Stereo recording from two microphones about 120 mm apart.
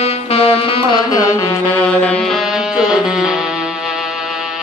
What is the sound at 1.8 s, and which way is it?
Music, 10° left (ahead or behind).